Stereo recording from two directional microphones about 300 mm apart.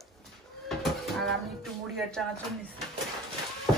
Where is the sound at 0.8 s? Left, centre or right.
Centre.